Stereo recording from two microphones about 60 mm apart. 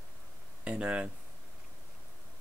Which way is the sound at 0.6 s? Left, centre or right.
Centre.